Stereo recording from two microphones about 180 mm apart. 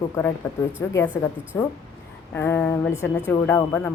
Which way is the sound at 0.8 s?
15° left (ahead or behind).